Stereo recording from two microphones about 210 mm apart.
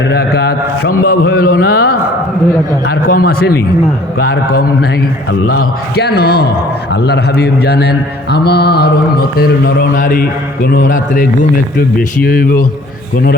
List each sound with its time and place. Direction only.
0.1 s a man's voice: 50° left (ahead or behind)
9.9 s a man's voice: 40° left (ahead or behind)